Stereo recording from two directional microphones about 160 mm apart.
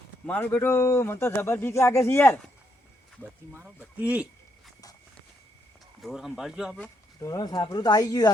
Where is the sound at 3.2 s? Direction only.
10° right (ahead or behind).